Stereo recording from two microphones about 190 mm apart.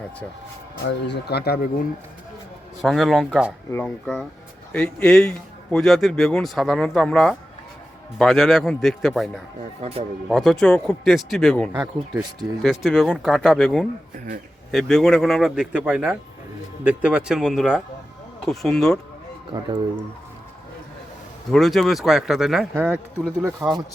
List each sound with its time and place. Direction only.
0.9 s speech: 65° left (ahead or behind)
2.8 s speech: centre (ahead or behind)
9.8 s speech: 35° right (ahead or behind)
10.2 s speech: centre (ahead or behind)
19.5 s speech: 20° right (ahead or behind)
21.5 s speech: centre (ahead or behind); by 23.8 s 15° right (ahead or behind)